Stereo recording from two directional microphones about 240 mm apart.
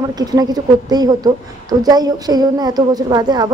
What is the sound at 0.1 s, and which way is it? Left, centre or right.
A woman's voice, centre.